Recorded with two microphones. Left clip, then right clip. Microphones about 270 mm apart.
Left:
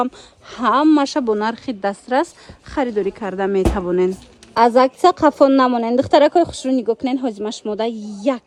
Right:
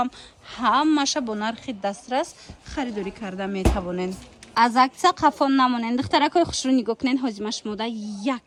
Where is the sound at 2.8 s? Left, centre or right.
Centre.